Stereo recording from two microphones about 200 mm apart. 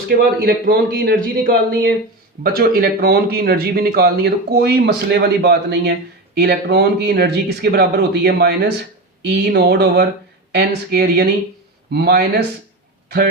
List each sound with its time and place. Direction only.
0.1 s a man's voice: 50° right (ahead or behind)